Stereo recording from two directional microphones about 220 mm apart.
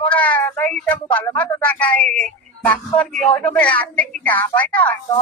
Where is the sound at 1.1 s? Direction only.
10° left (ahead or behind).